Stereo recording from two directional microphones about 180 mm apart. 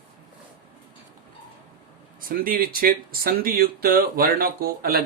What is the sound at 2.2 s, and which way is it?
Speech, 55° right (ahead or behind).